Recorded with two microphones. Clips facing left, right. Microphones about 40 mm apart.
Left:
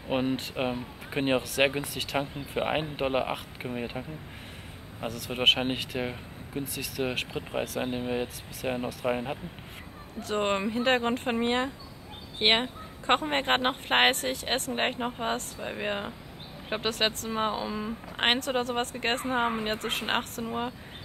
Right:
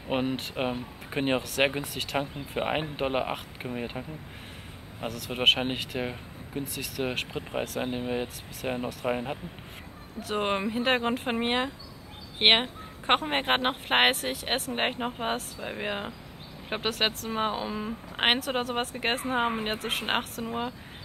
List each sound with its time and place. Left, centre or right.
0.1 s speech: centre
5.0 s speech: centre
12.4 s speech: right
13.2 s speech: centre